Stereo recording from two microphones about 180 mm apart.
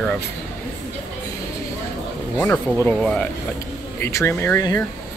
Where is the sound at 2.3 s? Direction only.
10° left (ahead or behind).